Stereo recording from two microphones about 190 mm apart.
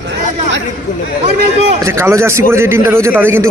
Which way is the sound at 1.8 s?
15° right (ahead or behind).